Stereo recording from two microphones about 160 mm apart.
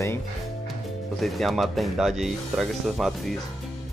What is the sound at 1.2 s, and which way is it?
Speech, centre (ahead or behind).